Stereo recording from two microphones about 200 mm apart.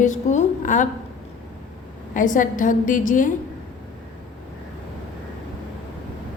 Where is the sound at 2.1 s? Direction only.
40° left (ahead or behind).